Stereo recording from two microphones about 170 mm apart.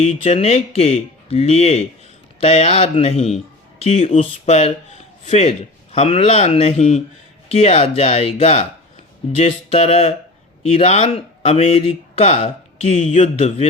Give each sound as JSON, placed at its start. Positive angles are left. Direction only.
{"t": 0.0, "sound": "speech", "side_deg": 35}